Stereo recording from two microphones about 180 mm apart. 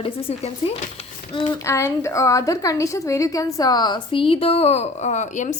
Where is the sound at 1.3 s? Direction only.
15° left (ahead or behind).